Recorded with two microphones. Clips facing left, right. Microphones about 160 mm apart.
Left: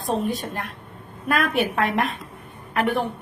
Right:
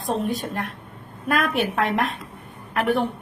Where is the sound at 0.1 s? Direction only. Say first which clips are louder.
Left 1 dB; 40° left (ahead or behind).